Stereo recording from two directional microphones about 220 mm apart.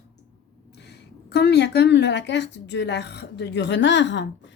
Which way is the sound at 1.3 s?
50° left (ahead or behind).